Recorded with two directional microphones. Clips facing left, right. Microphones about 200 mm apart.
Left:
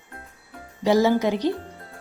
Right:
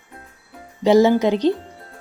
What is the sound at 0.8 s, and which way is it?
Speech, 20° right (ahead or behind).